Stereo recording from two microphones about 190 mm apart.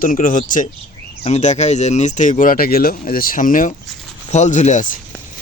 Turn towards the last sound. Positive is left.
turn(degrees=40)  # may be behind; listen again after turning